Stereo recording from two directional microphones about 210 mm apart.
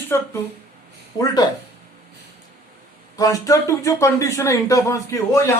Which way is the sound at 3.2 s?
15° left (ahead or behind).